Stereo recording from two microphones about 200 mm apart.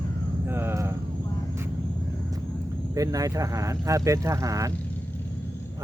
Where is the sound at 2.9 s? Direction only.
15° right (ahead or behind).